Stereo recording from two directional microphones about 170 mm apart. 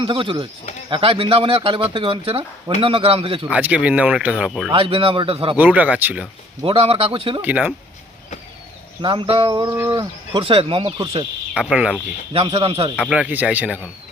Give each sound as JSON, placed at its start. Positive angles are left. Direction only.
{"t": 0.0, "sound": "speech", "side_deg": -30}
{"t": 3.5, "sound": "speech", "side_deg": -10}
{"t": 4.7, "sound": "speech", "side_deg": -35}
{"t": 5.5, "sound": "speech", "side_deg": -10}
{"t": 6.6, "sound": "speech", "side_deg": -35}
{"t": 7.4, "sound": "speech", "side_deg": -10}
{"t": 9.0, "sound": "speech", "side_deg": -30}
{"t": 10.4, "sound": "speech", "side_deg": -35}
{"t": 11.5, "sound": "speech", "side_deg": -5}
{"t": 12.3, "sound": "speech", "side_deg": -35}
{"t": 13.0, "sound": "speech", "side_deg": -5}